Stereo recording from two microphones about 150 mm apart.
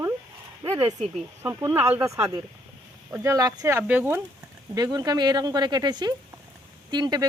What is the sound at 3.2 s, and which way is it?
Speech, 25° right (ahead or behind).